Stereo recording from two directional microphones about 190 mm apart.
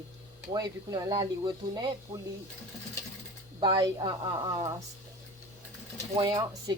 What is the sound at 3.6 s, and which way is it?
Speech, 25° right (ahead or behind).